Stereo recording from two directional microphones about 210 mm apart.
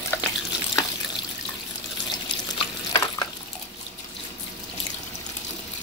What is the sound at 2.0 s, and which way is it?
Stir, 20° left (ahead or behind).